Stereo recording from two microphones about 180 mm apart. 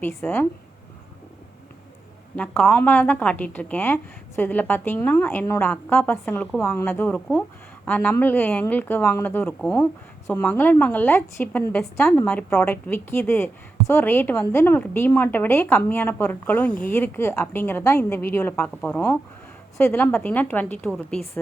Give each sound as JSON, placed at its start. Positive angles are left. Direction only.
{"t": 0.0, "sound": "a woman's voice", "side_deg": 10}
{"t": 2.3, "sound": "a woman's voice", "side_deg": 5}